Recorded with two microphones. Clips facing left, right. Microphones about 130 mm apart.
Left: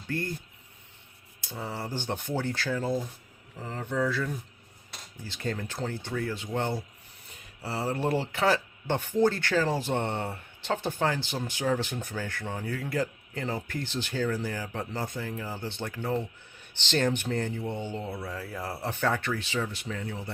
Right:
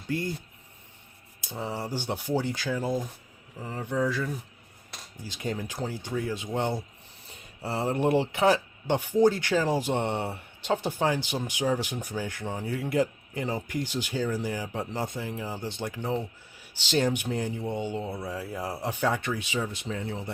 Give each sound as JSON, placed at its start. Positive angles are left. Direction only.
{"t": 0.1, "sound": "speech", "side_deg": -15}
{"t": 1.4, "sound": "speech", "side_deg": -15}
{"t": 19.9, "sound": "speech", "side_deg": -25}